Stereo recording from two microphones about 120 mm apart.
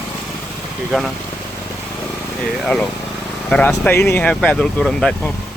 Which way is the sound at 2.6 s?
5° left (ahead or behind).